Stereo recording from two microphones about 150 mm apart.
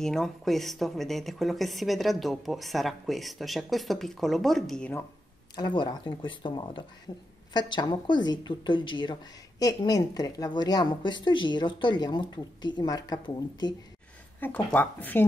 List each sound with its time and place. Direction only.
0.0 s speech: 5° left (ahead or behind)
5.6 s speech: 30° left (ahead or behind)
14.4 s speech: 10° left (ahead or behind)